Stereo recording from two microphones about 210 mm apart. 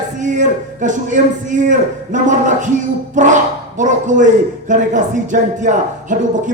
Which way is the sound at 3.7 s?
35° right (ahead or behind).